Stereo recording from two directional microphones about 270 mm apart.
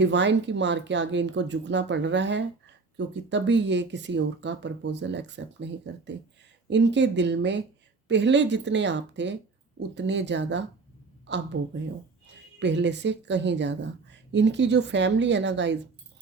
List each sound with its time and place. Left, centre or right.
0.0 s a woman's voice: right
12.5 s a woman's voice: right